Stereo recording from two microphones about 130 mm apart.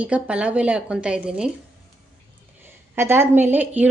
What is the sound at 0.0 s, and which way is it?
A woman's voice, 10° right (ahead or behind).